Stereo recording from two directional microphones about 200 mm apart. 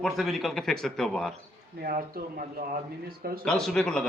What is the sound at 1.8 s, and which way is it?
Speech, 45° right (ahead or behind).